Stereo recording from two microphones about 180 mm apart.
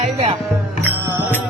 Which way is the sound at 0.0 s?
35° right (ahead or behind).